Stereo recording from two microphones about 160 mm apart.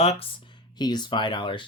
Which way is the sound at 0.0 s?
40° left (ahead or behind).